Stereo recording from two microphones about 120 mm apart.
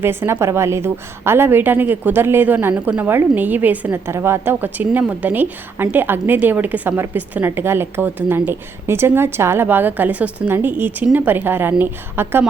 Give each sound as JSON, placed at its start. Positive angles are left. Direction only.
{"t": 0.0, "sound": "a woman's voice", "side_deg": -20}